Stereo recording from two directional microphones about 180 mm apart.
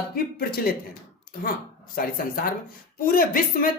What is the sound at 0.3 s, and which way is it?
Speech, 55° left (ahead or behind).